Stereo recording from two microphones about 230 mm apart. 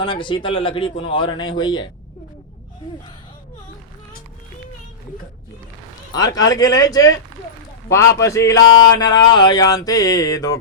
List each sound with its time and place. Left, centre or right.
0.0 s a man's voice: left
6.1 s speech: centre